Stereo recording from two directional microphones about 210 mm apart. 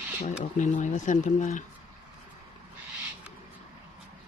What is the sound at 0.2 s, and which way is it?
Speech, 35° left (ahead or behind).